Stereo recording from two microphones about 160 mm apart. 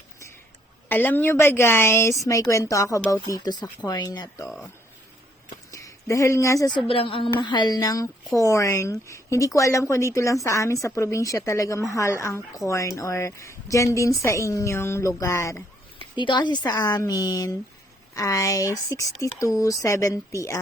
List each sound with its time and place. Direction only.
0.9 s a woman's voice: 10° left (ahead or behind)
4.4 s speech: centre (ahead or behind)
5.7 s speech: 20° left (ahead or behind)
6.8 s a woman's voice: 35° left (ahead or behind); by 15.6 s 20° left (ahead or behind)
16.0 s a woman's voice: 30° left (ahead or behind)